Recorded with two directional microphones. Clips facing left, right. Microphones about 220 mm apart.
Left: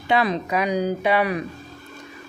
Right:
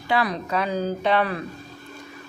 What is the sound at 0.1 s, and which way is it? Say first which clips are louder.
Speech: left 3 dB; 20° left (ahead or behind).